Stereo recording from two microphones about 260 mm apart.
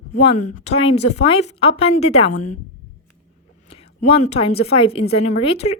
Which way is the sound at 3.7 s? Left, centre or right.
Left.